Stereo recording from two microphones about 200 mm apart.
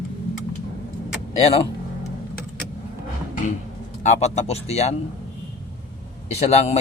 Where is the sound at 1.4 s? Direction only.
30° left (ahead or behind).